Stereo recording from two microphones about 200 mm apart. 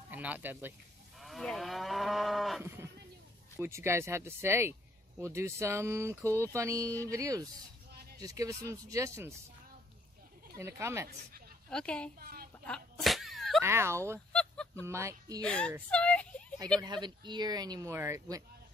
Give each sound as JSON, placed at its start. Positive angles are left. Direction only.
{"t": 0.1, "sound": "speech", "side_deg": -10}
{"t": 1.2, "sound": "moo", "side_deg": 0}
{"t": 2.6, "sound": "speech", "side_deg": -10}
{"t": 10.6, "sound": "speech", "side_deg": -15}
{"t": 11.7, "sound": "a woman's voice", "side_deg": 5}
{"t": 12.2, "sound": "a woman's voice", "side_deg": -50}
{"t": 12.6, "sound": "sneeze", "side_deg": 0}
{"t": 13.6, "sound": "speech", "side_deg": -15}
{"t": 14.3, "sound": "honk", "side_deg": 5}
{"t": 14.9, "sound": "speech", "side_deg": -15}
{"t": 15.4, "sound": "a woman's voice", "side_deg": 5}
{"t": 15.9, "sound": "a sound", "side_deg": 5}
{"t": 16.8, "sound": "speech", "side_deg": -20}